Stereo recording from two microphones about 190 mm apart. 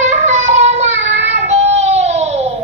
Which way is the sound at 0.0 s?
40° right (ahead or behind).